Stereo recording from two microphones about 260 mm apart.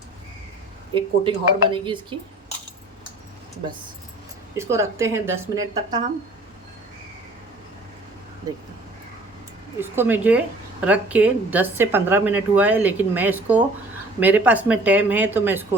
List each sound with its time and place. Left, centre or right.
0.9 s speech: centre
4.5 s a woman's voice: centre
8.5 s a woman's voice: centre
9.8 s a woman's voice: centre